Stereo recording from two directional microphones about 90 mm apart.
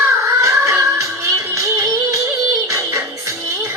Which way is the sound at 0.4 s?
35° right (ahead or behind).